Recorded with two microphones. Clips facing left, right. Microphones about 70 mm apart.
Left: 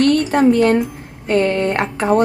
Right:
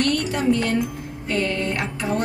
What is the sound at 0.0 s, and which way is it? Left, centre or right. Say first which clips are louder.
Speech: left 8 dB; left.